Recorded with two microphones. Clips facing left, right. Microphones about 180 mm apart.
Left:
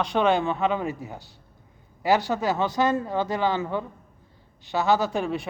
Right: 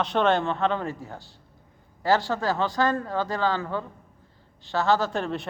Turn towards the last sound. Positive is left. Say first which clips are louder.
# left 2 dB
turn(degrees=10)  # may be behind; listen again after turning